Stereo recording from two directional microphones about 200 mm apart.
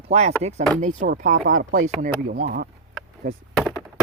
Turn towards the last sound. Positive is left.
turn(degrees=0)  # may be behind; listen again after turning